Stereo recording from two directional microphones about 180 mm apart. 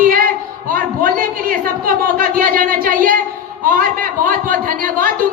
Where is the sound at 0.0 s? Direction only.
55° right (ahead or behind).